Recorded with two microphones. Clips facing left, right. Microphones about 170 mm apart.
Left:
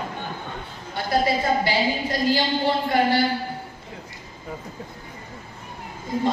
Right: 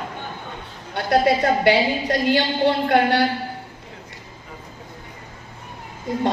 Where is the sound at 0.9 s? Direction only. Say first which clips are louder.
Right 4 dB; 70° right (ahead or behind).